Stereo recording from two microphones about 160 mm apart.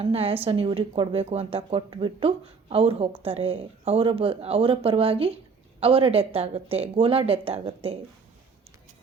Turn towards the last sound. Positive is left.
turn(degrees=-40)  # may be behind; listen again after turning